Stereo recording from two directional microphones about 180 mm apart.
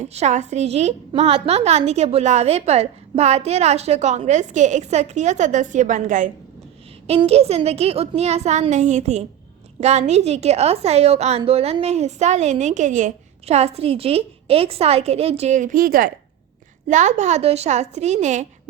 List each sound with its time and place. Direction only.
0.0 s a woman's voice: 40° right (ahead or behind)
7.1 s a woman's voice: 35° right (ahead or behind)